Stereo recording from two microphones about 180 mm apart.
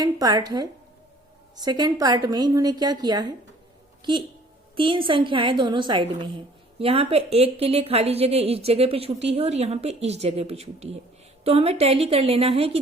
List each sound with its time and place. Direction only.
0.0 s a woman's voice: 20° right (ahead or behind)
4.8 s a woman's voice: 30° right (ahead or behind)